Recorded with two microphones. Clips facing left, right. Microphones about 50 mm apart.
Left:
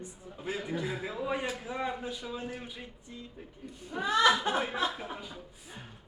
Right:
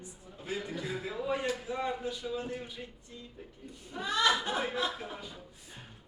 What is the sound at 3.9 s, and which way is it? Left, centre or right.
Speech, left.